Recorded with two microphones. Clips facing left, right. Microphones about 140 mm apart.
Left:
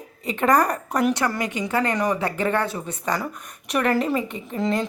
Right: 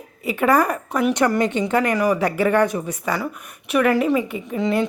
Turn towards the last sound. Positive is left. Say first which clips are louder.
# right 3 dB
turn(degrees=-5)  # may be behind; listen again after turning